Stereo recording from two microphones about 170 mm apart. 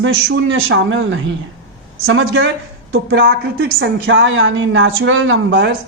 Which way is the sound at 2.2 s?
90° right.